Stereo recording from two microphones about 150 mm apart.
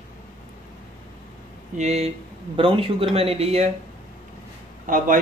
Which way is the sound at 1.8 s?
45° right (ahead or behind).